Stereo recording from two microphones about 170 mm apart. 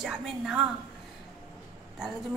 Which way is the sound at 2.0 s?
5° right (ahead or behind).